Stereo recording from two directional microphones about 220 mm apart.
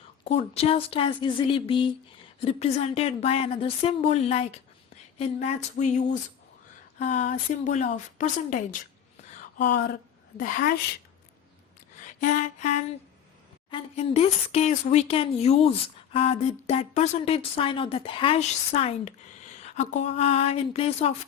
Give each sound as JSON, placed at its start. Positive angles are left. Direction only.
{"t": 0.3, "sound": "a woman's voice", "side_deg": 25}
{"t": 9.6, "sound": "a woman's voice", "side_deg": 50}
{"t": 11.9, "sound": "a sound", "side_deg": 35}
{"t": 13.7, "sound": "a woman's voice", "side_deg": 25}